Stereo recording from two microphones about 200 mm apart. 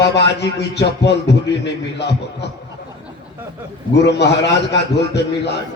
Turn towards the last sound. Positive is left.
turn(degrees=60)  # may be behind; listen again after turning